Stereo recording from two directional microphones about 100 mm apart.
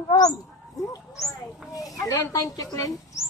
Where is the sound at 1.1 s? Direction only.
5° left (ahead or behind).